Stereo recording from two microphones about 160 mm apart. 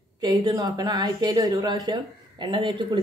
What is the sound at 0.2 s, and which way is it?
A woman's voice, 25° right (ahead or behind).